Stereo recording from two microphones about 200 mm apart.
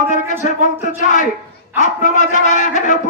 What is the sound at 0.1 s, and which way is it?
A man's voice, 35° left (ahead or behind).